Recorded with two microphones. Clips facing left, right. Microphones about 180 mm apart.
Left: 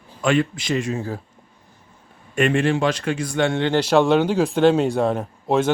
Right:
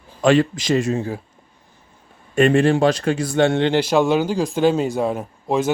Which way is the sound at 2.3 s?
35° right (ahead or behind).